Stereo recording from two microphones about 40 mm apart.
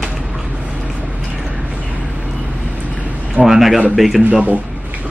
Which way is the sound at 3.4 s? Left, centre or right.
Centre.